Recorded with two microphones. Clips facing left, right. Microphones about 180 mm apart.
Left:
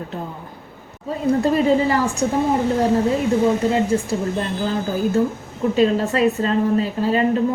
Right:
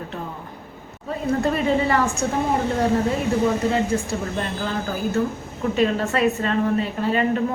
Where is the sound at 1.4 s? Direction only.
35° left (ahead or behind).